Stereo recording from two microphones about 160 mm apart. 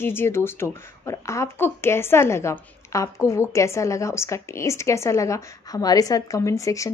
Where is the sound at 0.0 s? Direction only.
15° left (ahead or behind).